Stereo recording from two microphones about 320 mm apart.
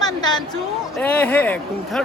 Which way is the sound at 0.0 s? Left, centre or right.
Centre.